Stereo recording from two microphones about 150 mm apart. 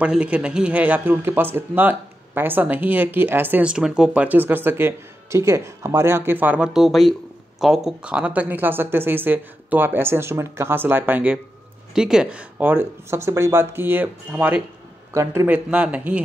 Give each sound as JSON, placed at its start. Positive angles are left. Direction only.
{"t": 0.0, "sound": "speech", "side_deg": -10}